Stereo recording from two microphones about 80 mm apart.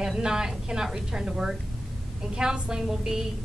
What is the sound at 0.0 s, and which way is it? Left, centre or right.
A woman's voice, centre.